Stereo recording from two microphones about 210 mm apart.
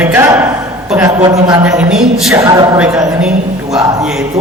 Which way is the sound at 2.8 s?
5° right (ahead or behind).